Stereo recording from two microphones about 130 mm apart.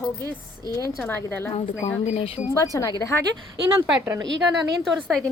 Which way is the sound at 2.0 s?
50° left (ahead or behind).